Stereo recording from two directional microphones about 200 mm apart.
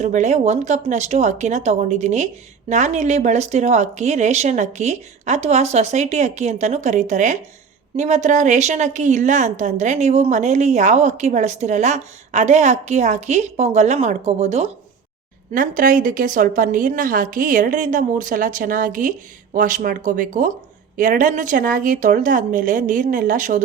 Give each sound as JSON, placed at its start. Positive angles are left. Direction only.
{"t": 0.0, "sound": "speech", "side_deg": -35}
{"t": 15.5, "sound": "a woman's voice", "side_deg": -45}